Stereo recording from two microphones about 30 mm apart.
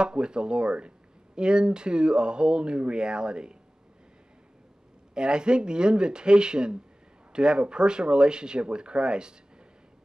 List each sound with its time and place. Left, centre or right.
0.0 s speech: right
5.1 s speech: right